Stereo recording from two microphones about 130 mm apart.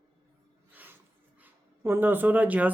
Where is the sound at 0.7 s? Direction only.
15° right (ahead or behind).